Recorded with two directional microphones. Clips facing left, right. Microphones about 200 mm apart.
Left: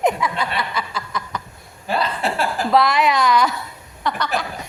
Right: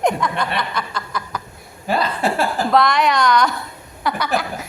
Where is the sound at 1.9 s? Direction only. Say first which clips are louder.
Right 2 dB; 45° right (ahead or behind).